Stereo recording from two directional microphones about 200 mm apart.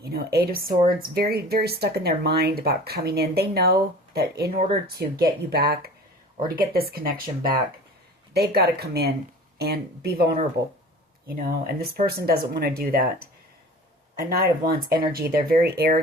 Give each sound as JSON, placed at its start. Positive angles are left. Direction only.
{"t": 0.0, "sound": "a woman's voice", "side_deg": -50}
{"t": 14.3, "sound": "speech", "side_deg": -50}